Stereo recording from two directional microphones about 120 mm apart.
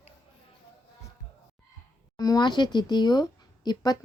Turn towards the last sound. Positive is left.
turn(degrees=35)  # may be behind; listen again after turning